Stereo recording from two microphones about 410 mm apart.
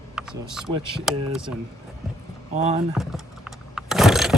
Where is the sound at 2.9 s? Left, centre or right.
Centre.